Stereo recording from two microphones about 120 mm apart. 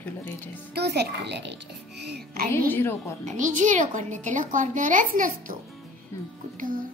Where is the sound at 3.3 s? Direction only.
90° right.